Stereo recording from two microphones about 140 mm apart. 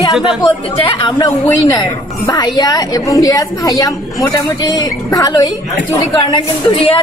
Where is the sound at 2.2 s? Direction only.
30° left (ahead or behind).